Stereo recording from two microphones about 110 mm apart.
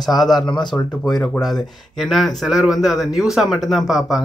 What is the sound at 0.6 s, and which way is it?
Speech, 40° left (ahead or behind).